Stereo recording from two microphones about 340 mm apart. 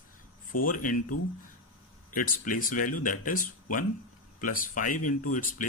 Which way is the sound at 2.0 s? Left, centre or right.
Left.